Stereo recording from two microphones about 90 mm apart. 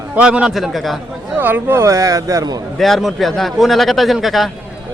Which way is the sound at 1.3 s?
20° right (ahead or behind).